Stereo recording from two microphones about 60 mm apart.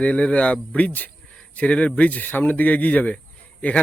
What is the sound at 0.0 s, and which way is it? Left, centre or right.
Speech, centre.